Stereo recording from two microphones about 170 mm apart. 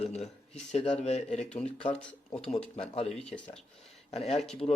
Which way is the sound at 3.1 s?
5° left (ahead or behind).